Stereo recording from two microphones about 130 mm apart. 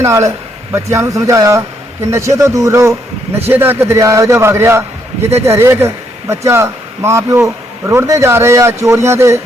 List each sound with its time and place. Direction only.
0.0 s speech: 25° right (ahead or behind)